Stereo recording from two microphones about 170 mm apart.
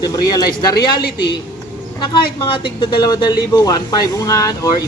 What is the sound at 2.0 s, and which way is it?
Speech, 25° left (ahead or behind).